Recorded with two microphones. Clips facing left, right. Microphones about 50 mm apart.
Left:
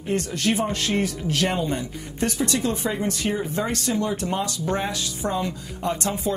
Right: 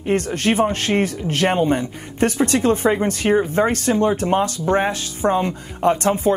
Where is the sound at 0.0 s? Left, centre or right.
Right.